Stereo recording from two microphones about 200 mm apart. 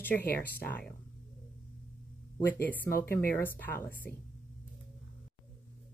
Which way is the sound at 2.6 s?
10° left (ahead or behind).